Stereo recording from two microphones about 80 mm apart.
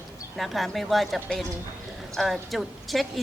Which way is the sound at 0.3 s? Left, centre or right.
Centre.